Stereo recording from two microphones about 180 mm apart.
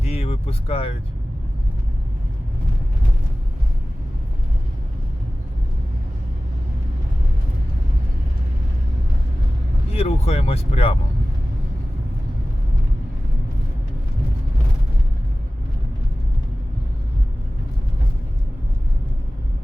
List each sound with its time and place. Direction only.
0.0 s vehicle: 35° left (ahead or behind)
9.9 s speech: 35° left (ahead or behind)